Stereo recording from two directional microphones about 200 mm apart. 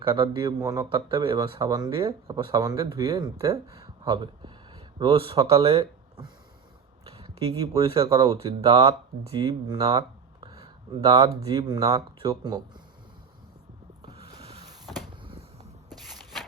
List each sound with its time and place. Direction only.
0.0 s speech: 25° right (ahead or behind)
14.0 s sanding: 25° right (ahead or behind)
15.2 s a sound: 25° right (ahead or behind)
16.0 s walk: centre (ahead or behind)